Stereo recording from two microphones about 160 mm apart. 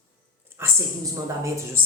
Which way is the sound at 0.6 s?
15° right (ahead or behind).